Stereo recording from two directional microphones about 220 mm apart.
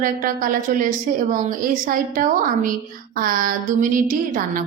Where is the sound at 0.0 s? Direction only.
40° right (ahead or behind).